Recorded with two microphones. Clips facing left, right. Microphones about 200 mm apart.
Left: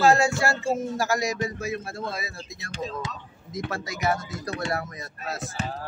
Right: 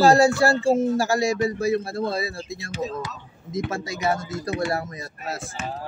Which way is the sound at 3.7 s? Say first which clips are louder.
Even; 25° right (ahead or behind).